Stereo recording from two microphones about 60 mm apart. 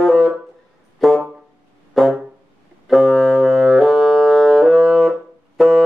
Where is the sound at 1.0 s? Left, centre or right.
Centre.